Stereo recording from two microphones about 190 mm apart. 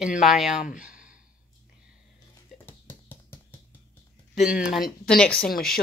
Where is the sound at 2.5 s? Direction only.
10° left (ahead or behind).